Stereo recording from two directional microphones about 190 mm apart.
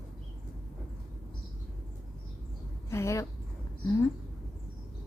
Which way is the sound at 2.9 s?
15° left (ahead or behind).